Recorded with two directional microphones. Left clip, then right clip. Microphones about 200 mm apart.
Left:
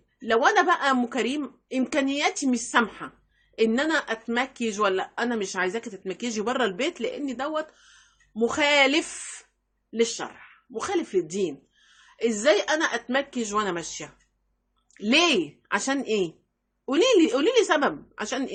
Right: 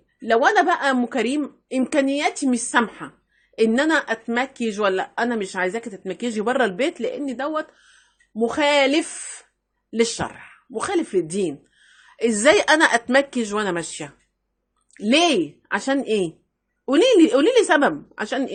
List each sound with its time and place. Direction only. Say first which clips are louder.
0.2 s a woman's voice: right 4 dB; 20° right (ahead or behind)
10.0 s speech: right 4 dB; 35° right (ahead or behind)